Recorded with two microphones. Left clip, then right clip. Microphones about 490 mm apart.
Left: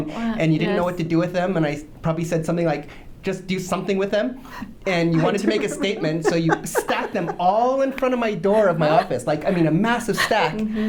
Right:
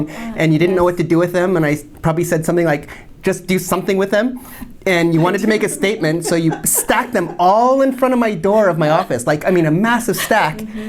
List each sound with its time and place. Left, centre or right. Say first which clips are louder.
0.3 s a woman's voice: right 8 dB; right